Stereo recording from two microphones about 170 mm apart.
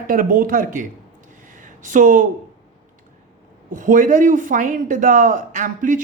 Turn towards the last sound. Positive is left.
turn(degrees=-50)  # may be behind; listen again after turning